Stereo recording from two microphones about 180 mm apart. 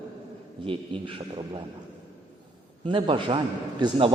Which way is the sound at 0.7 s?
30° right (ahead or behind).